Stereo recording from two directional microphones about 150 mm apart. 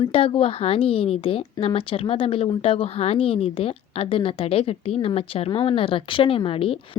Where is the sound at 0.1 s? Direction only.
40° left (ahead or behind).